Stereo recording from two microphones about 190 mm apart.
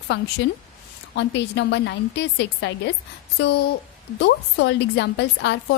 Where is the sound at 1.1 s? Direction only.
65° left (ahead or behind).